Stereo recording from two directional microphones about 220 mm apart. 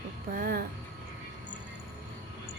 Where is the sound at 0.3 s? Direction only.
40° right (ahead or behind).